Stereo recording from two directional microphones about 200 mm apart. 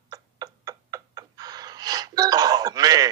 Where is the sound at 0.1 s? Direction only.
20° right (ahead or behind).